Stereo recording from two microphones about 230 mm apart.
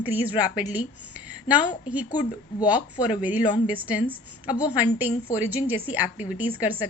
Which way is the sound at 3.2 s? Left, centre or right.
Centre.